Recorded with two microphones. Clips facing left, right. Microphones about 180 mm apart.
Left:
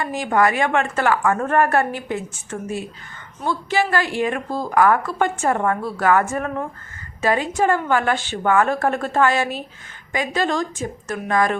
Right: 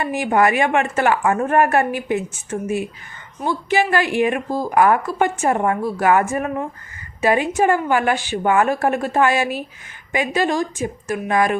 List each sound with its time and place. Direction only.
0.0 s a woman's voice: 20° right (ahead or behind)